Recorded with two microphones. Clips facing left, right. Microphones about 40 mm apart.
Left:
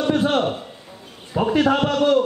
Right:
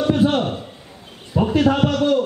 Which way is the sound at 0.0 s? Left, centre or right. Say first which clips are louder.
Right 1 dB; centre.